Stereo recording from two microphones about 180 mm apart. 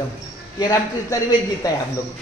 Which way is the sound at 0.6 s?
20° left (ahead or behind).